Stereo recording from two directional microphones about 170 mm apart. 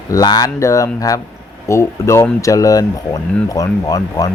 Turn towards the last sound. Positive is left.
turn(degrees=20)  # may be behind; listen again after turning